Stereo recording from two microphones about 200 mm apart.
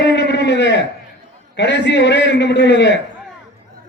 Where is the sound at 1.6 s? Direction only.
60° left (ahead or behind).